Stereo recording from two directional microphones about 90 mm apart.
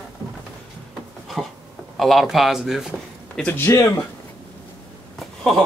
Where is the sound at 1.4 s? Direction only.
Centre (ahead or behind).